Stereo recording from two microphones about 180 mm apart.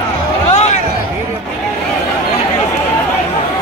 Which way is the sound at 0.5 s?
40° left (ahead or behind).